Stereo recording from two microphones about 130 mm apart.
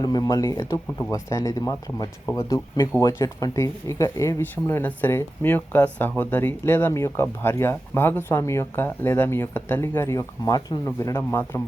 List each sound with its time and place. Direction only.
0.0 s speech: 30° left (ahead or behind)